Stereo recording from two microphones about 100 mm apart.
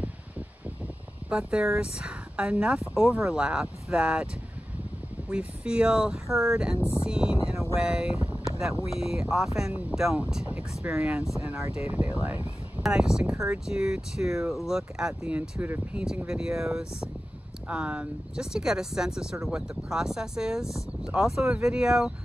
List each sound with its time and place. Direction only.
1.3 s speech: 10° right (ahead or behind)
5.6 s speech: 10° right (ahead or behind)
6.8 s speech: 25° left (ahead or behind)
7.8 s speech: 10° right (ahead or behind)